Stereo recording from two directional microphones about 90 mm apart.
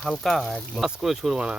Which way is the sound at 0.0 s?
5° left (ahead or behind).